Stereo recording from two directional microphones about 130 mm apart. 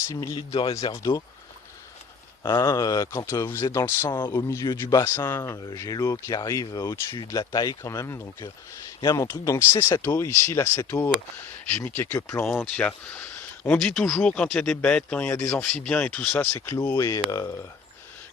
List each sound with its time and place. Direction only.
0.3 s speech: 45° left (ahead or behind)
0.9 s speech: 25° left (ahead or behind)
2.5 s speech: 25° left (ahead or behind)
9.0 s speech: 35° left (ahead or behind)
9.2 s speech: 20° left (ahead or behind)
16.6 s speech: 20° left (ahead or behind)